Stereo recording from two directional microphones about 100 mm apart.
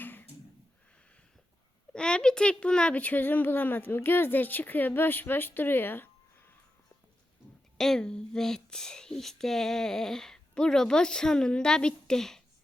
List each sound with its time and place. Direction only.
0.0 s a sound: 20° left (ahead or behind)
1.9 s speech: 10° left (ahead or behind)
7.8 s speech: 5° left (ahead or behind)